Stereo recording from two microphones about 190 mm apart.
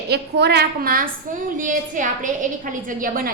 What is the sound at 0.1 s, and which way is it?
Speech, 60° right (ahead or behind).